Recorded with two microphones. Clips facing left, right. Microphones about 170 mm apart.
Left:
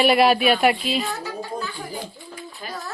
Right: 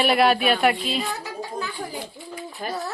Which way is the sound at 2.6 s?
50° right (ahead or behind).